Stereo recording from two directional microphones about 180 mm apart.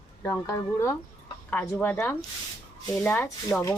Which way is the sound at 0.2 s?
15° left (ahead or behind).